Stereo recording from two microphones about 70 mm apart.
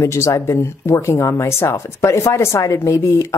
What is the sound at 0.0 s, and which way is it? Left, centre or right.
Speech, left.